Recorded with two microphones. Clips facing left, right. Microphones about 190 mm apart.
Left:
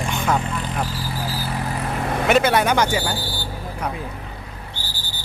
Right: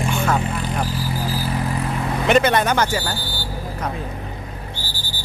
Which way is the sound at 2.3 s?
5° left (ahead or behind).